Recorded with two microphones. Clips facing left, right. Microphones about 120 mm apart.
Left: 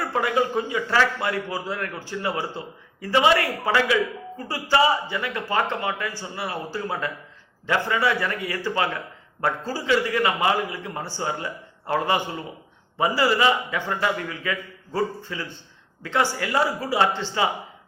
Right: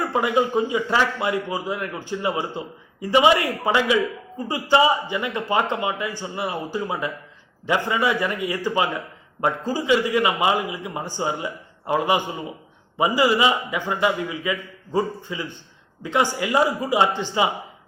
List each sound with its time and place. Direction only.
0.0 s a man's voice: 20° right (ahead or behind)